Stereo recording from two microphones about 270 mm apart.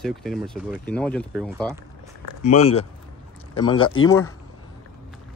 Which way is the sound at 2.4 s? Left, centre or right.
Left.